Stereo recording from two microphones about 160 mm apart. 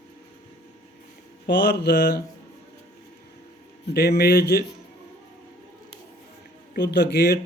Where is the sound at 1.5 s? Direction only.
90° left.